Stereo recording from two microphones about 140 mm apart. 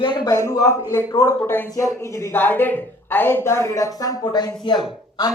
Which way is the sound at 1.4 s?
15° left (ahead or behind).